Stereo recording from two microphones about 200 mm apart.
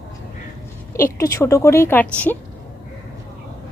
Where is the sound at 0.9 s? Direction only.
15° left (ahead or behind).